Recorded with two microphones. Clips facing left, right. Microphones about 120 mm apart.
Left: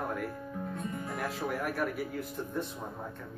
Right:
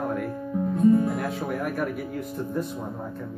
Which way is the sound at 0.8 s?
30° right (ahead or behind).